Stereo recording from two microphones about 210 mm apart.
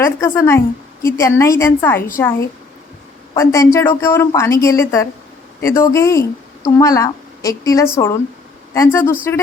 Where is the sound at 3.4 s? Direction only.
15° left (ahead or behind).